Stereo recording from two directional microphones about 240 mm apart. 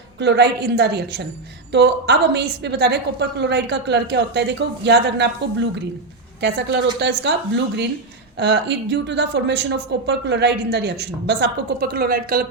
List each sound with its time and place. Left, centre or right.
0.2 s a woman's voice: right